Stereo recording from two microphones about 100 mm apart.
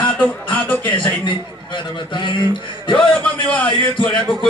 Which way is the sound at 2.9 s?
10° left (ahead or behind).